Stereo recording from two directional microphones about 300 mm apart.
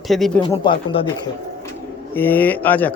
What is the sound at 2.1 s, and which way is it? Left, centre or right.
Speech, centre.